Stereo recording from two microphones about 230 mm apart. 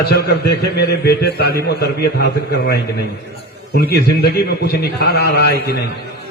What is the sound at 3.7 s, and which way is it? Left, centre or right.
A man's voice, left.